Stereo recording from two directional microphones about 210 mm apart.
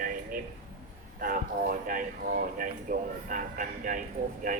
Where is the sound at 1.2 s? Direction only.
40° right (ahead or behind).